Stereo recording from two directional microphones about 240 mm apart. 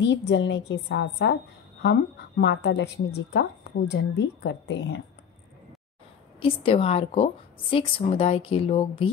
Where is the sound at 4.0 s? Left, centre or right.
Left.